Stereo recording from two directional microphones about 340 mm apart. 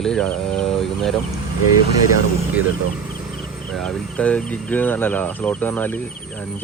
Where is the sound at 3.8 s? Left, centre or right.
Centre.